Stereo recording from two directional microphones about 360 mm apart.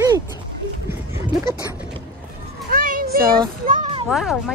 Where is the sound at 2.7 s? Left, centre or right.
Right.